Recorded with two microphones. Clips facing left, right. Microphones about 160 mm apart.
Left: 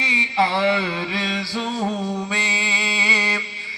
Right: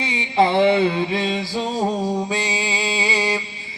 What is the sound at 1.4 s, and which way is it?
Music, 45° right (ahead or behind).